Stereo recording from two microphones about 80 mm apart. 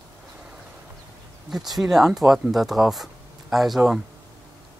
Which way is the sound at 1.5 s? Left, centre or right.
Centre.